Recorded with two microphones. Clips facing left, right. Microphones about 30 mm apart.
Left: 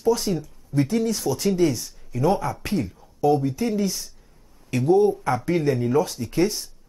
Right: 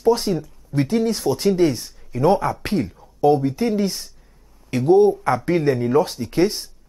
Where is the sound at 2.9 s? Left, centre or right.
Right.